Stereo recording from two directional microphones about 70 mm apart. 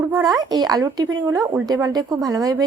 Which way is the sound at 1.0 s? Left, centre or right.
Right.